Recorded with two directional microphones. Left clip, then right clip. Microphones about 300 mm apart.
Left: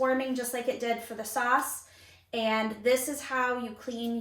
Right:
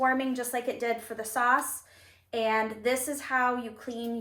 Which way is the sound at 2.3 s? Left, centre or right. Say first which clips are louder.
Right 1 dB; centre.